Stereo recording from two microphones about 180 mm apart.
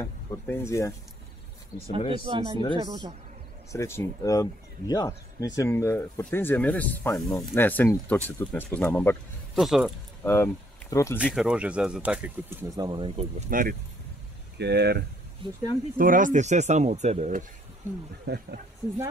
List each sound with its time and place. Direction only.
0.0 s speech: 15° left (ahead or behind)
2.0 s speech: 25° right (ahead or behind)
3.7 s speech: 15° left (ahead or behind)
9.6 s speech: centre (ahead or behind)
10.2 s speech: 15° left (ahead or behind)
11.3 s speech: 5° right (ahead or behind); by 13.5 s 35° right (ahead or behind)
13.5 s speech: 50° right (ahead or behind)
14.6 s speech: 65° right (ahead or behind)
16.0 s speech: 50° right (ahead or behind)
18.2 s speech: 65° right (ahead or behind)